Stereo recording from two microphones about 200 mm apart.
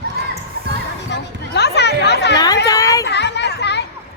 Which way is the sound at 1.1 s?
55° left (ahead or behind).